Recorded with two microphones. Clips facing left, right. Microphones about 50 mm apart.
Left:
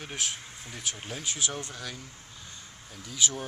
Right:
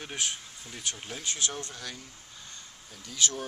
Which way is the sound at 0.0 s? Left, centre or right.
Centre.